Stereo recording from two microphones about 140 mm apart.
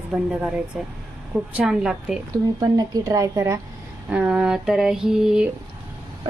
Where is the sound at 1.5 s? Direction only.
5° right (ahead or behind).